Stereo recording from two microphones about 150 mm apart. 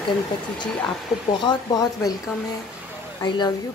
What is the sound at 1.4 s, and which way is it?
Speech, 25° left (ahead or behind).